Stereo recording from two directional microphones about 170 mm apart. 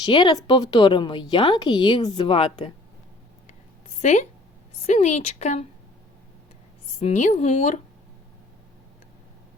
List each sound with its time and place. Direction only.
0.0 s speech: 25° left (ahead or behind)
3.8 s a sound: 40° left (ahead or behind)
4.9 s a woman's voice: 40° left (ahead or behind)
7.0 s speech: 45° left (ahead or behind)